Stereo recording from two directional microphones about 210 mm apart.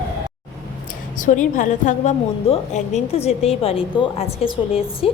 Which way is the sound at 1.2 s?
35° left (ahead or behind).